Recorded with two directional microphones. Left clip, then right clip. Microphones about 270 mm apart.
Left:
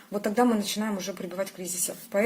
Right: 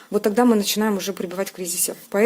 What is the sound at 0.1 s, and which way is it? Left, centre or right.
Speech, right.